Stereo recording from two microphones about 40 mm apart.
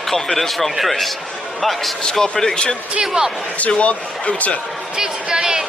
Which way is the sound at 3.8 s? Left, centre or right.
Left.